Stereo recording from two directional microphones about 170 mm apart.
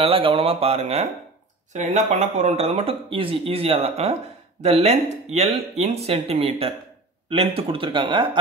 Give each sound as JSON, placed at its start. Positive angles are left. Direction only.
{"t": 0.0, "sound": "speech", "side_deg": -35}